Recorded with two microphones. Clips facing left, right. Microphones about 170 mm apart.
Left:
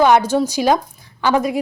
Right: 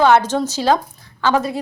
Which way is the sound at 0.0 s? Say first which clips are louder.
Left 1 dB; 10° left (ahead or behind).